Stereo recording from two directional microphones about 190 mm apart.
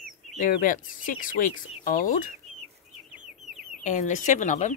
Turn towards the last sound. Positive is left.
turn(degrees=40)  # may be behind; listen again after turning